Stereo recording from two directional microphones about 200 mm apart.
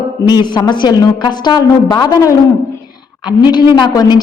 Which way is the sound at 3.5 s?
20° left (ahead or behind).